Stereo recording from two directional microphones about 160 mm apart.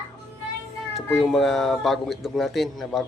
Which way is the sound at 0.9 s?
Centre (ahead or behind).